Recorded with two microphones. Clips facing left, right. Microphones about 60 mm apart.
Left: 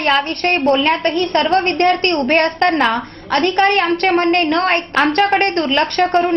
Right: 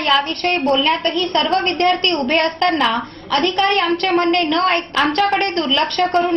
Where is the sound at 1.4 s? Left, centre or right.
Left.